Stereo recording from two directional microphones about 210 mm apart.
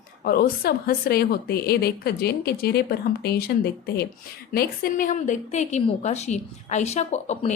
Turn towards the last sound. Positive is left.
turn(degrees=30)  # may be behind; listen again after turning